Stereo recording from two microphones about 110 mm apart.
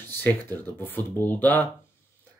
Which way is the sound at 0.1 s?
15° left (ahead or behind).